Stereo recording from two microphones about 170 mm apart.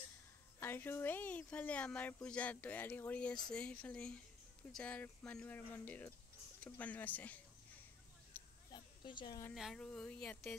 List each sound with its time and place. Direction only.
0.6 s speech: 15° left (ahead or behind)
8.7 s a sound: 25° left (ahead or behind)
9.5 s speech: centre (ahead or behind)